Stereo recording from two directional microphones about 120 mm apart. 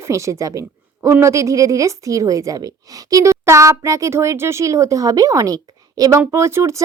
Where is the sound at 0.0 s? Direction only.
25° right (ahead or behind).